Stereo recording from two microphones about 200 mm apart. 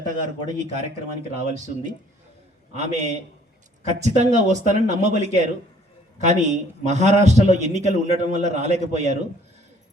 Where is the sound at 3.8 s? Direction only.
35° right (ahead or behind).